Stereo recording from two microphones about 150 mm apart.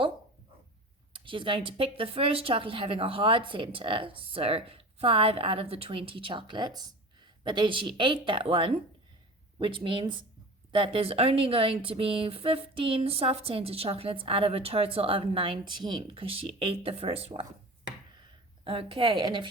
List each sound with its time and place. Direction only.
1.1 s speech: 35° right (ahead or behind)
18.6 s speech: 40° right (ahead or behind)